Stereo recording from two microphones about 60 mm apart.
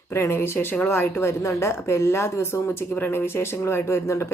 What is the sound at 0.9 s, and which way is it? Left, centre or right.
Speech, left.